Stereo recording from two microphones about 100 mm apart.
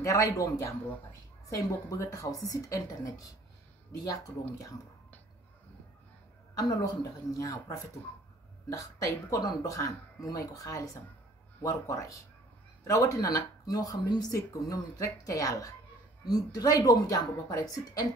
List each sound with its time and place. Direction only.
0.0 s speech: 35° left (ahead or behind)
6.5 s speech: 35° left (ahead or behind)